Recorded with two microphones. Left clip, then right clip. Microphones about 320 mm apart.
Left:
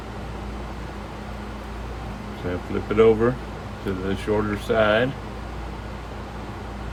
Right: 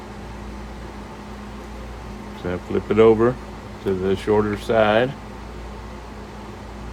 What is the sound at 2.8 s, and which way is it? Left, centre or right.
Speech, right.